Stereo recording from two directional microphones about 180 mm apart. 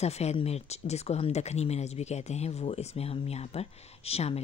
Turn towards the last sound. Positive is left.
turn(degrees=35)  # may be behind; listen again after turning